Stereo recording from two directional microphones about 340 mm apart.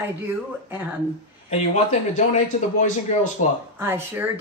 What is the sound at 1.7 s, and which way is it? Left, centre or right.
Speech, centre.